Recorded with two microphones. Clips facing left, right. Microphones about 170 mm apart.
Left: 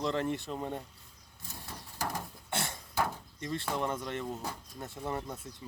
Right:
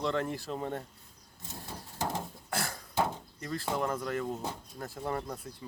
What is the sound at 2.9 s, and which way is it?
Chop, 20° right (ahead or behind).